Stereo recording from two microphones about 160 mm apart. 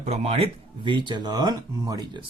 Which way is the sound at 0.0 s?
40° right (ahead or behind).